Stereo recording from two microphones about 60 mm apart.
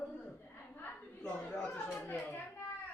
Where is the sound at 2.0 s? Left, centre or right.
Left.